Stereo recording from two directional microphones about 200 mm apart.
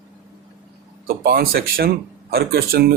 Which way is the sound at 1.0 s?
50° right (ahead or behind).